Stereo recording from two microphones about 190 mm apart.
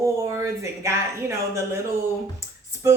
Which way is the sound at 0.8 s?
15° right (ahead or behind).